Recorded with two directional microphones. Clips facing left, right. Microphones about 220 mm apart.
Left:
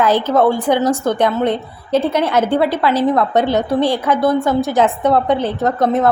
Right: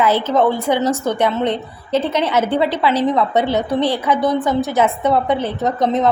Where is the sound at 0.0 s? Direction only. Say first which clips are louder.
Left 2 dB; 10° left (ahead or behind).